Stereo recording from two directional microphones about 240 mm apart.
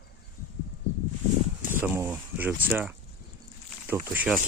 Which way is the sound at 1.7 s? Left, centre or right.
Centre.